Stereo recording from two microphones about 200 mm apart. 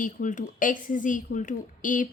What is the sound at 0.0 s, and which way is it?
A woman's voice, 40° left (ahead or behind).